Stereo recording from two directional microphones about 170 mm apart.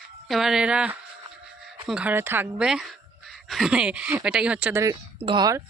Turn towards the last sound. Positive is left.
turn(degrees=-25)  # may be behind; listen again after turning